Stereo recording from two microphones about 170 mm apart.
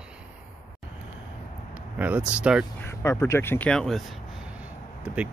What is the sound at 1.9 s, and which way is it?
Speech, 10° right (ahead or behind).